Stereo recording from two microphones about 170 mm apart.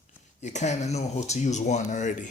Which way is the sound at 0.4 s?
45° left (ahead or behind).